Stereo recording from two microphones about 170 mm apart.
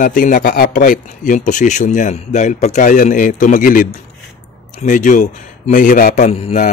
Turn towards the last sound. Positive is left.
turn(degrees=40)  # may be behind; listen again after turning